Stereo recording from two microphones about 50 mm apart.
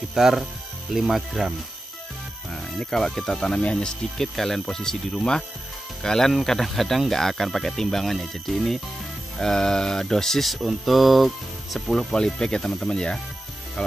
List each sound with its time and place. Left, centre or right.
0.1 s speech: centre
2.8 s speech: centre